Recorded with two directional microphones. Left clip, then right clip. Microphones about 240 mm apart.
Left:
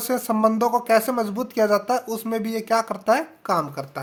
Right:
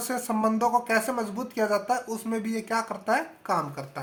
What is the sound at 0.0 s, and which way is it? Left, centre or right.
Speech, left.